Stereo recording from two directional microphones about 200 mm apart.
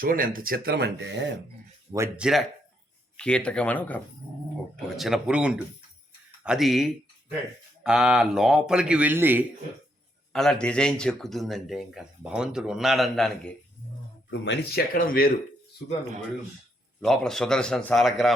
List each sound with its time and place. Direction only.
0.0 s speech: 45° right (ahead or behind); by 1.4 s 65° right (ahead or behind)
1.9 s speech: 15° right (ahead or behind)
2.2 s speech: centre (ahead or behind)
10.3 s speech: 5° left (ahead or behind)
14.3 s speech: 65° left (ahead or behind); by 15.3 s 45° left (ahead or behind)
17.0 s speech: centre (ahead or behind)